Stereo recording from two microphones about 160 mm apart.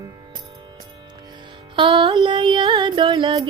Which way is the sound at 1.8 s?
35° right (ahead or behind).